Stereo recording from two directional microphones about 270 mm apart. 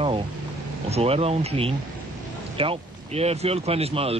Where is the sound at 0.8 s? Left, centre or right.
Right.